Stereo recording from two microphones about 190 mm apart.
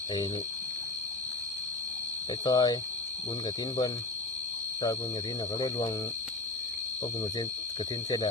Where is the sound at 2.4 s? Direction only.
20° left (ahead or behind).